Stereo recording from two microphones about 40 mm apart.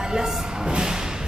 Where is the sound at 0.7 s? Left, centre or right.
Centre.